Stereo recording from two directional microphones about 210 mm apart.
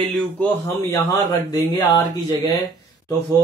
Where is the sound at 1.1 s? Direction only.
15° left (ahead or behind).